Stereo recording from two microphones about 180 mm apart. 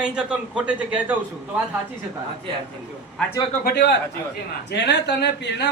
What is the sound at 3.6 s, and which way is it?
A man's voice, 65° left (ahead or behind).